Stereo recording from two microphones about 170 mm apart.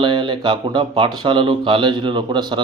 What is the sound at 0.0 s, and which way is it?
Speech, 30° right (ahead or behind).